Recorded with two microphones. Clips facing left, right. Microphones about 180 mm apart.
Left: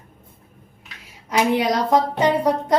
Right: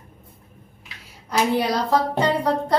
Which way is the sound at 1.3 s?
15° left (ahead or behind).